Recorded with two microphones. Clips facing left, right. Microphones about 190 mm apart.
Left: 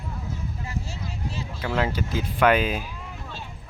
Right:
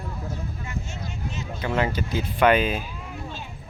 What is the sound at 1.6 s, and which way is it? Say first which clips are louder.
Speech: right 1 dB; centre (ahead or behind).